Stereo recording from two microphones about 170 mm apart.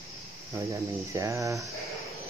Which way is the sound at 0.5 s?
15° right (ahead or behind).